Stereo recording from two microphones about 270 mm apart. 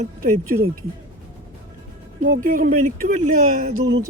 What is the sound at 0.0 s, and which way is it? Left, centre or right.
Speech, right.